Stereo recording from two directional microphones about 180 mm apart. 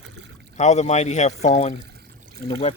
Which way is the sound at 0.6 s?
40° left (ahead or behind).